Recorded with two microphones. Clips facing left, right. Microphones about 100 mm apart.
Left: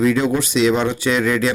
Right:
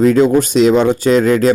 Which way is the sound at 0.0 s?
45° right (ahead or behind).